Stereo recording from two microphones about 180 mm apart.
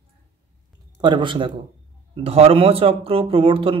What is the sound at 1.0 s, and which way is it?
A man's voice, 25° right (ahead or behind).